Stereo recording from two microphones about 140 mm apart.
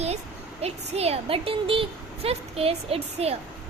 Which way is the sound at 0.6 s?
45° right (ahead or behind).